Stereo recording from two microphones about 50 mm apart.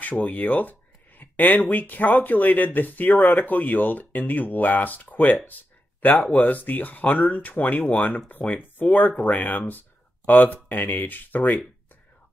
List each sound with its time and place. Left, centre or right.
0.2 s speech: left
6.3 s speech: left